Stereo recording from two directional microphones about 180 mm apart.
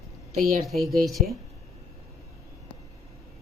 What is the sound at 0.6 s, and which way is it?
Speech, centre (ahead or behind).